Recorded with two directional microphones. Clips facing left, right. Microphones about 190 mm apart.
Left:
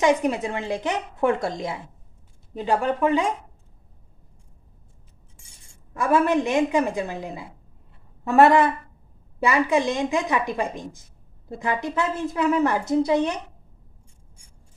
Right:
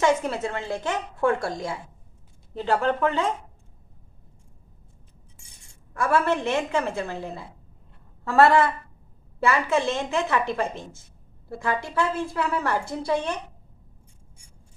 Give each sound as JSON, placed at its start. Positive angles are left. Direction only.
{"t": 0.0, "sound": "a woman's voice", "side_deg": 15}
{"t": 5.9, "sound": "a woman's voice", "side_deg": 15}